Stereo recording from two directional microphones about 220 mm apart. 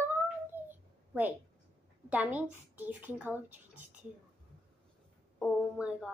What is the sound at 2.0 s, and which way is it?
Speech, 5° right (ahead or behind).